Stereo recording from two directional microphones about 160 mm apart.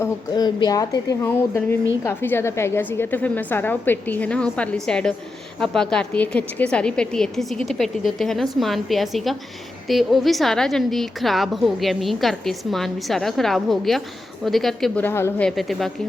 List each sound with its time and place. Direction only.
0.0 s a woman's voice: 25° left (ahead or behind); by 15.0 s centre (ahead or behind)
15.0 s a woman's voice: 15° left (ahead or behind)
15.4 s a woman's voice: centre (ahead or behind)